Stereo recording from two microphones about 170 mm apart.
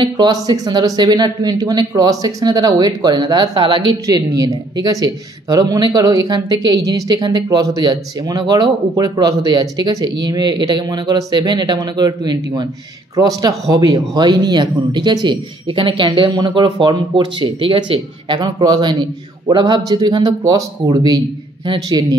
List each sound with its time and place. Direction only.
0.0 s speech: 25° right (ahead or behind)